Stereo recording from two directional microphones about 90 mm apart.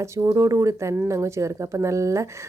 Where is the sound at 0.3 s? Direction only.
35° right (ahead or behind).